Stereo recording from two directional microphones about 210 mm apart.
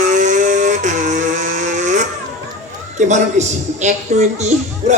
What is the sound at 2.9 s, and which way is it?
A woman's voice, 35° right (ahead or behind).